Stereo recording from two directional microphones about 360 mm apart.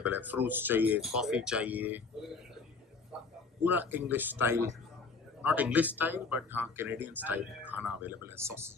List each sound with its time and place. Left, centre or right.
0.0 s speech: centre
3.6 s speech: centre